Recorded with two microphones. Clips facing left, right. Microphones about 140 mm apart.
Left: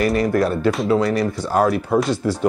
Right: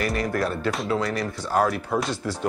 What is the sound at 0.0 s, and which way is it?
Speech, 20° left (ahead or behind).